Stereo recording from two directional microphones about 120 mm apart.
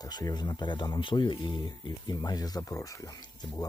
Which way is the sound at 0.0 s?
35° left (ahead or behind).